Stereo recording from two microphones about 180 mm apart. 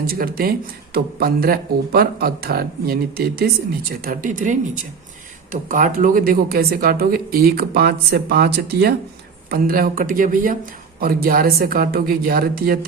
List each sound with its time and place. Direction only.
0.0 s speech: 55° right (ahead or behind)